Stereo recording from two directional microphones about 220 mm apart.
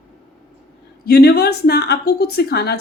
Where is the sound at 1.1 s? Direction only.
45° left (ahead or behind).